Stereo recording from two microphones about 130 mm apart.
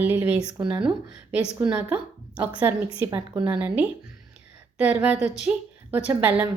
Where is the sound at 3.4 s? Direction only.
15° right (ahead or behind).